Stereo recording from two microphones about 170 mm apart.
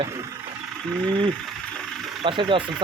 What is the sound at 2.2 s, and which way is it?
Speech, 30° right (ahead or behind).